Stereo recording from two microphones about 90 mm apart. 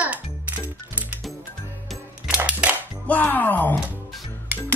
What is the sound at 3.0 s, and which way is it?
Speech, 20° left (ahead or behind).